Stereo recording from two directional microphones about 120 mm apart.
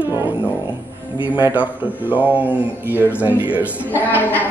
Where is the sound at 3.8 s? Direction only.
15° left (ahead or behind).